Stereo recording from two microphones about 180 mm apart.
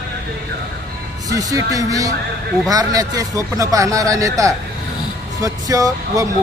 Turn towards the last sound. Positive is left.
turn(degrees=-20)  # may be behind; listen again after turning